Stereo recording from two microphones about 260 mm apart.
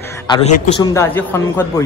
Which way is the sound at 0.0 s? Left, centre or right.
Centre.